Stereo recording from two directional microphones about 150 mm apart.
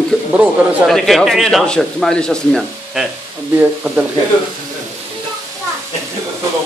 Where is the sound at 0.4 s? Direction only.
Centre (ahead or behind).